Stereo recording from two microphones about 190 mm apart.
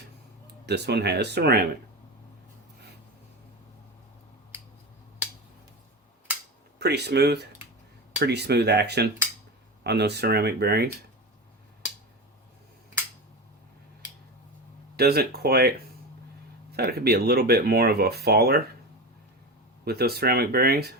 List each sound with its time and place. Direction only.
0.6 s speech: 60° right (ahead or behind)
6.7 s speech: 60° right (ahead or behind)
14.9 s speech: 55° right (ahead or behind)
16.7 s speech: 55° right (ahead or behind)
19.8 s speech: 55° right (ahead or behind)